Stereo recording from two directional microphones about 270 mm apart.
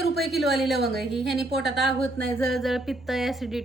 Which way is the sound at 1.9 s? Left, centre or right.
Right.